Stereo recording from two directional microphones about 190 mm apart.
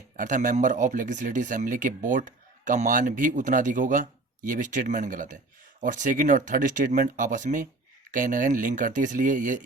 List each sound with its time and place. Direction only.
0.2 s a man's voice: 45° right (ahead or behind)